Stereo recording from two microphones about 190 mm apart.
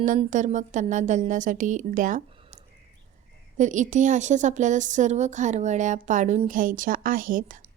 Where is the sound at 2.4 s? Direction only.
35° right (ahead or behind).